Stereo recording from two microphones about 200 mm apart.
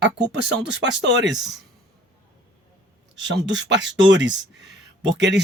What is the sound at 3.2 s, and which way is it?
Speech, 60° right (ahead or behind).